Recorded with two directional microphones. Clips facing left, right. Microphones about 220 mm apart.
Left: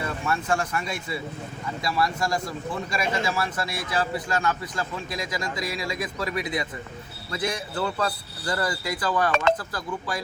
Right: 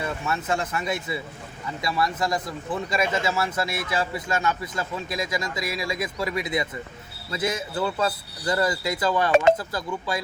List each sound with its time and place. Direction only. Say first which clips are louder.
0.3 s speech: left 2 dB; 20° right (ahead or behind)